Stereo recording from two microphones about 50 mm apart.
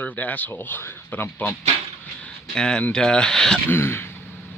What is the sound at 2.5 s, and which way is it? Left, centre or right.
Speech, centre.